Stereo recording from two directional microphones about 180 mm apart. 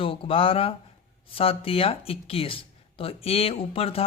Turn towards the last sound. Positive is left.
turn(degrees=30)  # may be behind; listen again after turning